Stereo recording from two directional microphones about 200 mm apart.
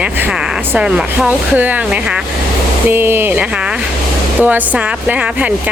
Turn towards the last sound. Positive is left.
turn(degrees=-10)  # may be behind; listen again after turning